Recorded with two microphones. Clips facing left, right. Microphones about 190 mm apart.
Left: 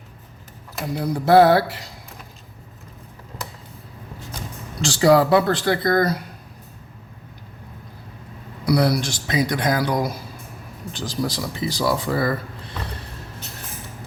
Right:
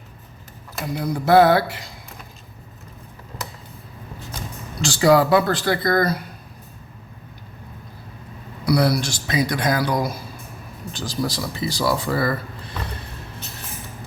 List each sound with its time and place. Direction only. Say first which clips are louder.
0.9 s mantra: left 1 dB; 30° left (ahead or behind)
4.8 s speech: even; 30° left (ahead or behind)
8.6 s speech: even; 20° left (ahead or behind)
12.9 s a sound: even; 35° left (ahead or behind)